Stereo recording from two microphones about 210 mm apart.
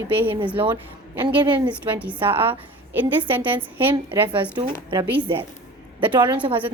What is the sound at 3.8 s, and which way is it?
A woman's voice, 25° right (ahead or behind).